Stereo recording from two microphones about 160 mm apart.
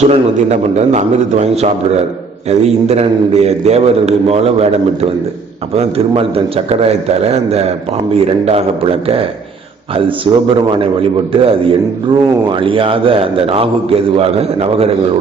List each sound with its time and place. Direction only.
0.0 s a man's voice: 45° right (ahead or behind)
10.3 s a man's voice: 30° right (ahead or behind)